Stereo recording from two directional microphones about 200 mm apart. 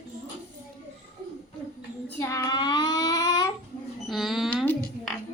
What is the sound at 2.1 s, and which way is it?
Child singing, 15° left (ahead or behind).